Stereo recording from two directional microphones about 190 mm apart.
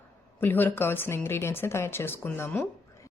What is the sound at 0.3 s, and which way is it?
Speech, 10° left (ahead or behind).